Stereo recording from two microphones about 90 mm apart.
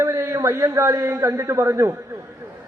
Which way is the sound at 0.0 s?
30° right (ahead or behind).